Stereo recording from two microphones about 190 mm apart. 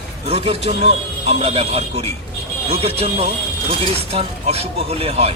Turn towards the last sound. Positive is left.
turn(degrees=-30)  # may be behind; listen again after turning